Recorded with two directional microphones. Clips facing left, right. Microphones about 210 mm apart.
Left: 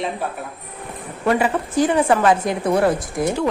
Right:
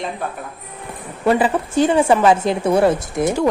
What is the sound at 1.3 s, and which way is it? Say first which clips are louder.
A woman's voice: right 2 dB; 30° right (ahead or behind).